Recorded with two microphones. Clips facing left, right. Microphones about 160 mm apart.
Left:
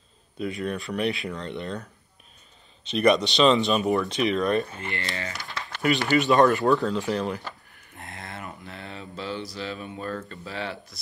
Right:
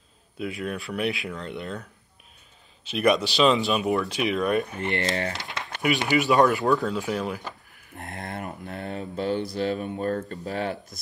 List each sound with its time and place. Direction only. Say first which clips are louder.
0.4 s speech: left 1 dB; 5° right (ahead or behind)
5.0 s speech: right 7 dB; 45° right (ahead or behind)
5.3 s a sound: right 2 dB; 20° right (ahead or behind)
5.8 s speech: left 1 dB; 10° right (ahead or behind)
8.0 s speech: right 4 dB; 50° right (ahead or behind)